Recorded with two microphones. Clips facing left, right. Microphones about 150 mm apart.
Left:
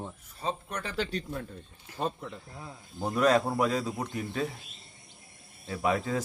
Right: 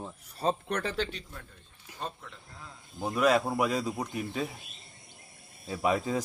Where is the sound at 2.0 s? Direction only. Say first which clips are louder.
Left 7 dB; 60° left (ahead or behind).